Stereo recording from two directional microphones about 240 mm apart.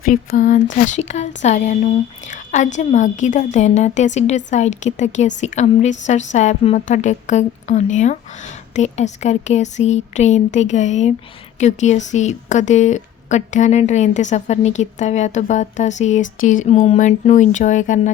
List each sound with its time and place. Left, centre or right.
0.0 s a woman's voice: left